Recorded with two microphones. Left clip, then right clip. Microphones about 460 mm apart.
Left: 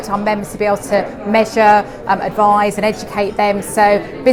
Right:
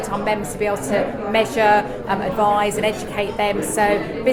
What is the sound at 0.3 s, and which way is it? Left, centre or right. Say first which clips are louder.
A woman's voice: left 5 dB; left.